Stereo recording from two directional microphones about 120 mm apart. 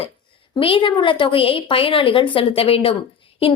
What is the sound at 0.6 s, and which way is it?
A woman's voice, 45° left (ahead or behind).